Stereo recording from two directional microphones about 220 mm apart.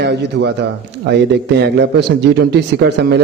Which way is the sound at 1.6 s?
50° right (ahead or behind).